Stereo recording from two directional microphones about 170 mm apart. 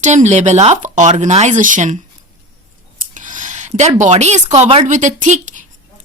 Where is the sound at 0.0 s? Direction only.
45° right (ahead or behind).